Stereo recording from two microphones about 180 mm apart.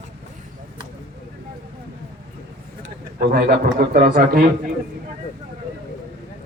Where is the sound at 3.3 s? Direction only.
60° right (ahead or behind).